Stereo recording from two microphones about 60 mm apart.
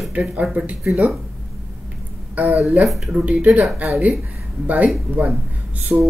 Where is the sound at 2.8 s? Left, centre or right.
Centre.